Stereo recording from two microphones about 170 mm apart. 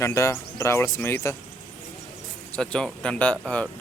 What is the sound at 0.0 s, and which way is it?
Speech, 15° left (ahead or behind).